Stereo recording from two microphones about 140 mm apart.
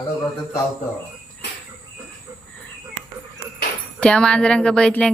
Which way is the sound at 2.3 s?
25° right (ahead or behind).